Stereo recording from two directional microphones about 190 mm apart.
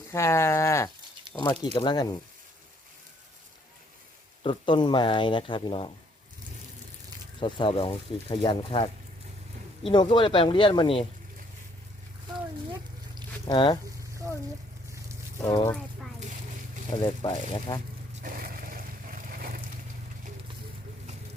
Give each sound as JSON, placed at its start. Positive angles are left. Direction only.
{"t": 0.1, "sound": "speech", "side_deg": 15}
{"t": 4.4, "sound": "speech", "side_deg": 25}
{"t": 7.3, "sound": "speech", "side_deg": 25}
{"t": 13.5, "sound": "speech", "side_deg": 25}
{"t": 15.4, "sound": "speech", "side_deg": 20}
{"t": 17.0, "sound": "speech", "side_deg": 25}
{"t": 18.1, "sound": "a sound", "side_deg": -45}